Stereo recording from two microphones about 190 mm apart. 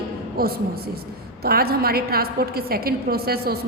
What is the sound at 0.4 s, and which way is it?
A woman's voice, 50° right (ahead or behind).